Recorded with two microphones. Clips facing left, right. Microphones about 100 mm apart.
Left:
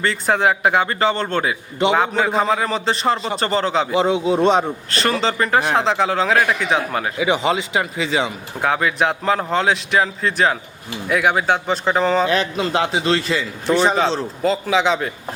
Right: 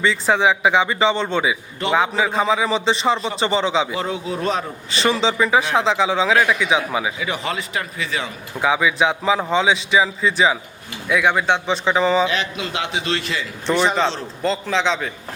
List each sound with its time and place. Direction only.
0.0 s a man's voice: centre (ahead or behind)
4.1 s speech: 25° left (ahead or behind)
4.9 s a man's voice: centre (ahead or behind)
7.2 s speech: 25° left (ahead or behind)
8.6 s a man's voice: 5° right (ahead or behind)
12.3 s a man's voice: 40° left (ahead or behind)
14.4 s a man's voice: 5° left (ahead or behind)